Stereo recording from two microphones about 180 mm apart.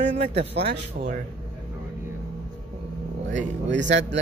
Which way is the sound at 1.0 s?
55° right (ahead or behind).